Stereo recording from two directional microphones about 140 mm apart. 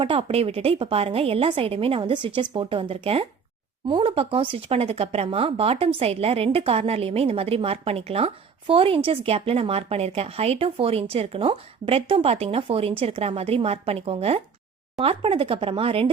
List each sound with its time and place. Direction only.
0.0 s a woman's voice: 40° right (ahead or behind)